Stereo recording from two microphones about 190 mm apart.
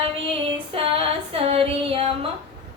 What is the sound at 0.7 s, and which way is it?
Female singing, 30° right (ahead or behind).